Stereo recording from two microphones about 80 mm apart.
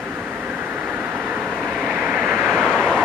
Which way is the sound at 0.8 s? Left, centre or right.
Right.